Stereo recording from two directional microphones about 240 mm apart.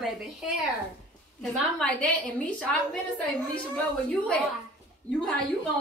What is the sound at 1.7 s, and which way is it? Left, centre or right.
Speech, centre.